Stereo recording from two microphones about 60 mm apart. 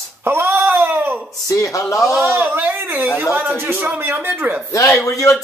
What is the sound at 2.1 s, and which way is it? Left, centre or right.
Speech, right.